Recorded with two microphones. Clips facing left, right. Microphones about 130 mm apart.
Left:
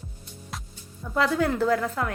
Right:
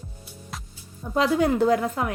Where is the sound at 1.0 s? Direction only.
20° right (ahead or behind).